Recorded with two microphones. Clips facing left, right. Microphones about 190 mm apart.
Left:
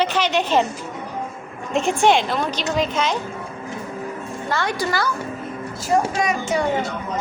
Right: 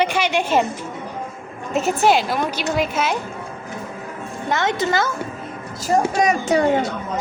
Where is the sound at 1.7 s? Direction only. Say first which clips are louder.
Even; 5° right (ahead or behind).